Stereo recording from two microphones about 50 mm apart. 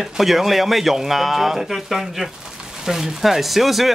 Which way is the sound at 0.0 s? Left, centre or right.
Centre.